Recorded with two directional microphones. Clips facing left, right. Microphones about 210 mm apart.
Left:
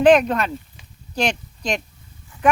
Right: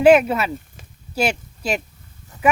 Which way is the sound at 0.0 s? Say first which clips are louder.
Right 1 dB; 5° right (ahead or behind).